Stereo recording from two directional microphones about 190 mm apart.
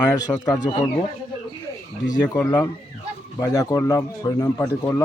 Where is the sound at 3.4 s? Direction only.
20° left (ahead or behind).